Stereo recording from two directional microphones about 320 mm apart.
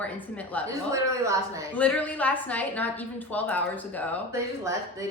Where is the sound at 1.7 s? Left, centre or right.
Centre.